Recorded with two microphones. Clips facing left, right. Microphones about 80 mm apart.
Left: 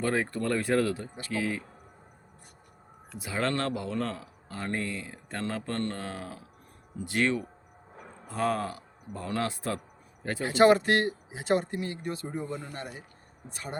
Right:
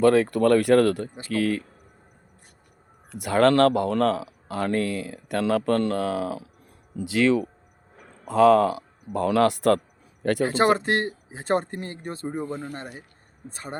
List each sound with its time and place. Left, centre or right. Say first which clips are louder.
0.0 s speech: right 11 dB; right
3.2 s speech: right 12 dB; right
10.4 s speech: left 1 dB; right
13.5 s speech: right 2 dB; right